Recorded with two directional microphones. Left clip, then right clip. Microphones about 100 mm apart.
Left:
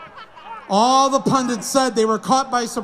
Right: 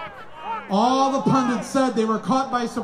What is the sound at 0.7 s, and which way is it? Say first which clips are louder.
A man's voice: left 5 dB; 50° left (ahead or behind).